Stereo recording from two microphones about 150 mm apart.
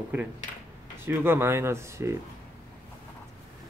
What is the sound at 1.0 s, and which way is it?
Speech, 15° right (ahead or behind).